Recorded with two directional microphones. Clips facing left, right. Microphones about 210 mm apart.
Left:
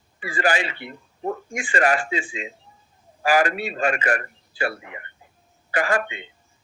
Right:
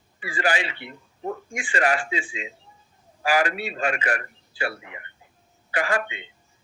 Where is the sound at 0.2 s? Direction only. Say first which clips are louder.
Left 2 dB; 45° left (ahead or behind).